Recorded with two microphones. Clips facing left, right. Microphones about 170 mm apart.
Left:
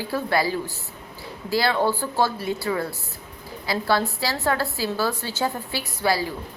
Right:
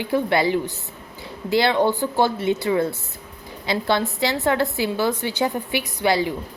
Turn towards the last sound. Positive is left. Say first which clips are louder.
# right 3 dB
turn(degrees=-20)  # may be behind; listen again after turning